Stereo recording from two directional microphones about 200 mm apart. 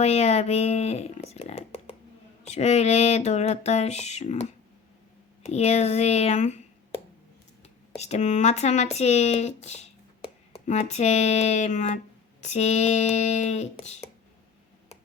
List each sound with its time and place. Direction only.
0.0 s speech: 30° left (ahead or behind)